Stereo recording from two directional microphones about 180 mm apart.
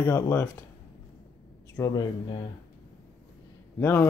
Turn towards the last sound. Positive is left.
turn(degrees=15)  # may be behind; listen again after turning